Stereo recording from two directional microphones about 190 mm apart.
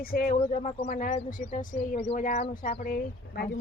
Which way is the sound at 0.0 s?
50° left (ahead or behind).